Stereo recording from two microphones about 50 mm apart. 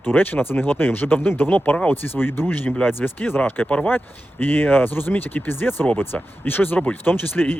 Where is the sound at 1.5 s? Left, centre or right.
Left.